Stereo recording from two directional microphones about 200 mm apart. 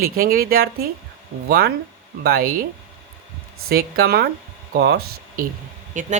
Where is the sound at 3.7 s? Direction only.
50° right (ahead or behind).